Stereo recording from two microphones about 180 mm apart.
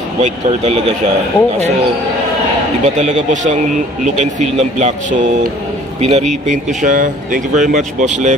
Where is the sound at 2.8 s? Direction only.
40° right (ahead or behind).